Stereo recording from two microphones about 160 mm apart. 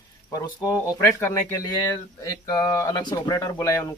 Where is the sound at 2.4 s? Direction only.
25° left (ahead or behind).